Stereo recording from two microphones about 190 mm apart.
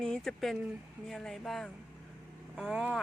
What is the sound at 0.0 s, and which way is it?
A woman's voice, 5° left (ahead or behind).